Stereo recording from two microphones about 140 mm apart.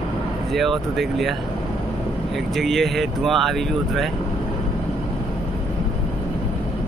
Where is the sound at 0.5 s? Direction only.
Centre (ahead or behind).